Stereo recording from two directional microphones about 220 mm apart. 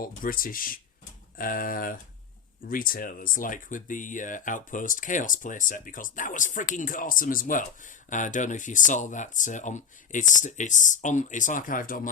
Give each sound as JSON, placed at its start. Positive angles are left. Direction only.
{"t": 0.0, "sound": "speech", "side_deg": 40}